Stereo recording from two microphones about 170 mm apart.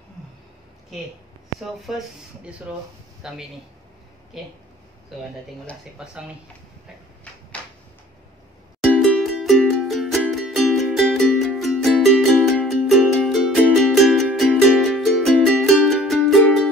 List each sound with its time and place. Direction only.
1.6 s speech: centre (ahead or behind)
7.3 s a sound: 10° left (ahead or behind)
9.0 s music: centre (ahead or behind)